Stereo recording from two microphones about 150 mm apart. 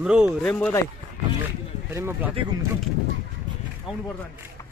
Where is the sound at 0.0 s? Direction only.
5° right (ahead or behind).